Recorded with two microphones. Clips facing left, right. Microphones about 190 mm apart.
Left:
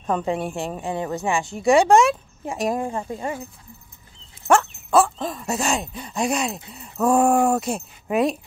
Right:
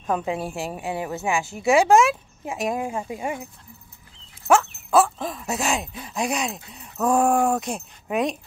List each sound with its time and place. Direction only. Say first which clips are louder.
0.0 s a woman's voice: left 2 dB; 5° right (ahead or behind)
4.5 s a woman's voice: left 1 dB; centre (ahead or behind)